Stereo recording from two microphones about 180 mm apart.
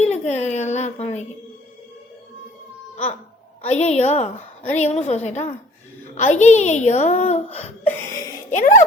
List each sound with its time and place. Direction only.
0.0 s a woman's voice: 40° left (ahead or behind)
3.6 s a woman's voice: 40° left (ahead or behind)